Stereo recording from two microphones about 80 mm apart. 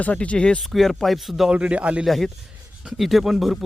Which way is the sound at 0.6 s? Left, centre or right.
Centre.